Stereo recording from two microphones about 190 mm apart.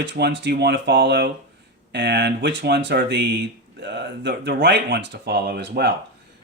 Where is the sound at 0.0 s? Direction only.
65° right (ahead or behind).